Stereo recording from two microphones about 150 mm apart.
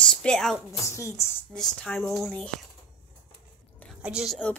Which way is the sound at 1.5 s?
5° left (ahead or behind).